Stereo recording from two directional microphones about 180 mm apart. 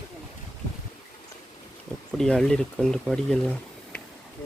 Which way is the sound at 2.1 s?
Centre (ahead or behind).